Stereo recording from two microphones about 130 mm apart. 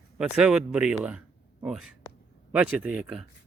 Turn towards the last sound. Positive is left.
turn(degrees=-5)  # may be behind; listen again after turning